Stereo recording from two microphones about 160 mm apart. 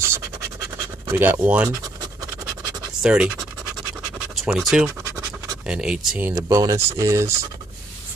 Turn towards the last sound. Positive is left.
turn(degrees=-20)  # may be behind; listen again after turning